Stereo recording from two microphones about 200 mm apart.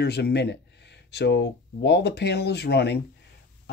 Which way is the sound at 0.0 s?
55° left (ahead or behind).